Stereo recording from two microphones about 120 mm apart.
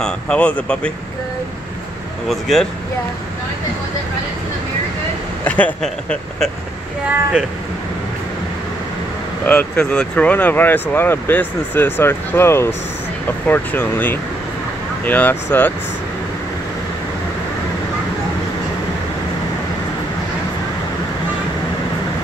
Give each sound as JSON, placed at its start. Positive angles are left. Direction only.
{"t": 0.0, "sound": "speech", "side_deg": 10}
{"t": 2.2, "sound": "speech", "side_deg": 0}
{"t": 5.4, "sound": "speech", "side_deg": 10}
{"t": 9.5, "sound": "speech", "side_deg": 15}